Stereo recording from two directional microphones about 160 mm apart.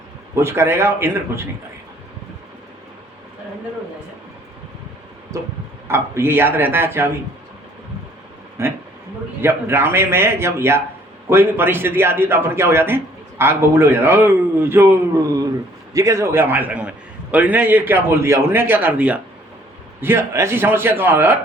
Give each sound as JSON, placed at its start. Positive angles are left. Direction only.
{"t": 0.3, "sound": "a man's voice", "side_deg": -15}
{"t": 5.3, "sound": "a sound", "side_deg": -20}
{"t": 5.9, "sound": "a man's voice", "side_deg": -15}
{"t": 8.6, "sound": "a man's voice", "side_deg": -15}